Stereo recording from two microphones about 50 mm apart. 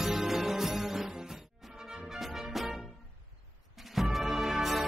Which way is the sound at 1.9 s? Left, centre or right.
Centre.